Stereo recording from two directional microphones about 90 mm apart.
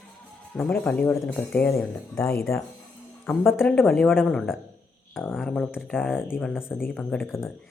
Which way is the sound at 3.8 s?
Centre (ahead or behind).